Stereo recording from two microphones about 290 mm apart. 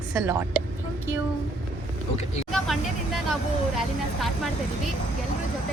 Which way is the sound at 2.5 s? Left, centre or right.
Centre.